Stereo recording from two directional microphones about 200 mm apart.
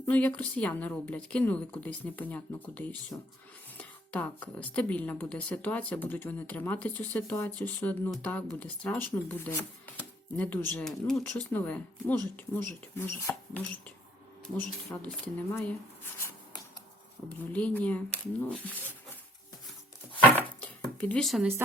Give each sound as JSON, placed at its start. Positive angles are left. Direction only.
{"t": 0.0, "sound": "speech", "side_deg": 5}
{"t": 17.2, "sound": "speech", "side_deg": 5}
{"t": 20.1, "sound": "a sound", "side_deg": 5}